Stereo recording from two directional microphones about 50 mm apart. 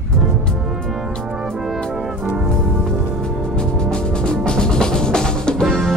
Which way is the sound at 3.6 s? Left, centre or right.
Centre.